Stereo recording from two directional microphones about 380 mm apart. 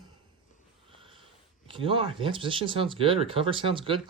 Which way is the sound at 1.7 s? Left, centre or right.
Centre.